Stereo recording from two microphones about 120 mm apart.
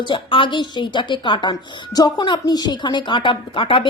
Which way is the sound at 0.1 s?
45° left (ahead or behind).